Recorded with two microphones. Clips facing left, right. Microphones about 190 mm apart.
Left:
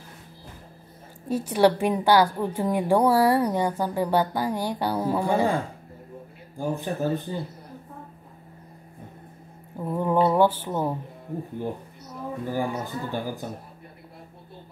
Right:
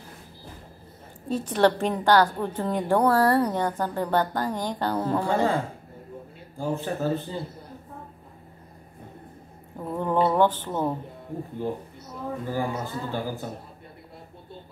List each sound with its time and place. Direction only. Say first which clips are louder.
1.3 s a woman's voice: left 1 dB; 10° left (ahead or behind)
6.6 s a woman's voice: even; 15° left (ahead or behind)
9.8 s a woman's voice: left 2 dB; 10° left (ahead or behind)
12.4 s a woman's voice: left 2 dB; 15° left (ahead or behind)